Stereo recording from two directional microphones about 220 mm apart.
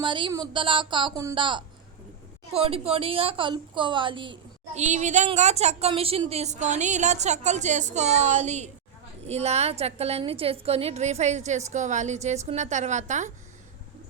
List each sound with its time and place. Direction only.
0.0 s a woman's voice: 20° right (ahead or behind)